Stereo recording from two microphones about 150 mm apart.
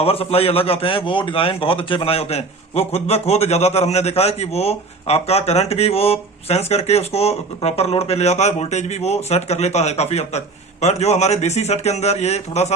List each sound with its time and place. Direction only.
0.0 s a man's voice: 40° left (ahead or behind)